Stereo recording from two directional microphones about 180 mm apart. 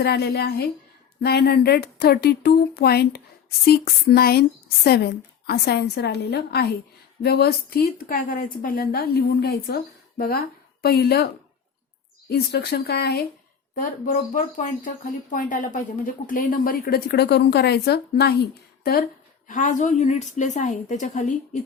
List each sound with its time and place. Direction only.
0.0 s speech: 60° left (ahead or behind)
12.3 s speech: 65° left (ahead or behind)
13.7 s a woman's voice: 50° left (ahead or behind)
19.5 s a woman's voice: 45° left (ahead or behind)